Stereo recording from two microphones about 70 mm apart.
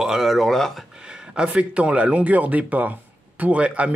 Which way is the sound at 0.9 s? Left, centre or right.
Centre.